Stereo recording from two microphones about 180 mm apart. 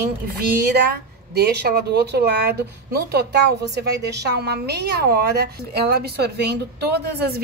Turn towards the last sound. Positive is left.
turn(degrees=-65)  # may be behind; listen again after turning